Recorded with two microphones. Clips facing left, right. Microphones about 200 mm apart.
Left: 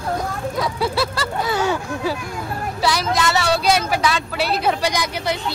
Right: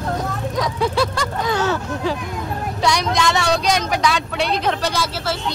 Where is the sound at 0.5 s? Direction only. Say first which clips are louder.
Right 2 dB; 10° left (ahead or behind).